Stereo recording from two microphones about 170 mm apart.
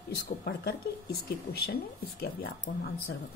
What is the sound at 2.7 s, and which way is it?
Speech, 60° left (ahead or behind).